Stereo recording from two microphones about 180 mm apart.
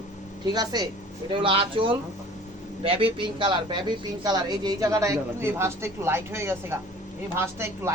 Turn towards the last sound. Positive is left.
turn(degrees=-15)  # may be behind; listen again after turning